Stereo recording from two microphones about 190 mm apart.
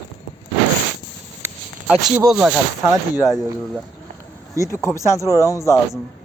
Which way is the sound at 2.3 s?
5° right (ahead or behind).